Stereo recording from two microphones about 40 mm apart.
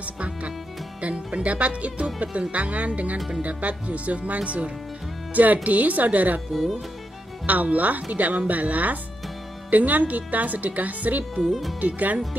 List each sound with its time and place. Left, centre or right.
0.0 s speech: right
6.5 s speech: centre
7.4 s speech: right